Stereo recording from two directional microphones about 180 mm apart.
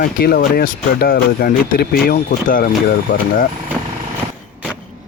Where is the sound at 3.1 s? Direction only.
65° left (ahead or behind).